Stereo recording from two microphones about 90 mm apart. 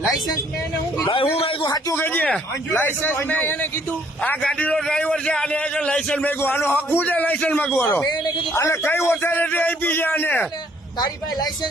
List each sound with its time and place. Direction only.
1.1 s a sound: 80° left
2.7 s a man's voice: 20° left (ahead or behind)
6.4 s a man's voice: 25° left (ahead or behind)